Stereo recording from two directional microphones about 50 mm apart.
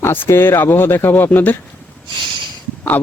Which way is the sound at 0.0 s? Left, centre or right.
Left.